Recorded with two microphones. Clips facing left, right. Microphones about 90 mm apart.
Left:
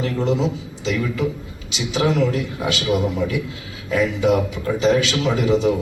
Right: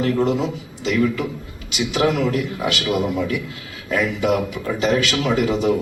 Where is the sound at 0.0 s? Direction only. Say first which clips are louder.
Right 2 dB; 50° right (ahead or behind).